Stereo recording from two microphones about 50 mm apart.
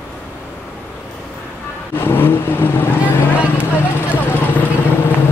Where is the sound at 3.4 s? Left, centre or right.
Right.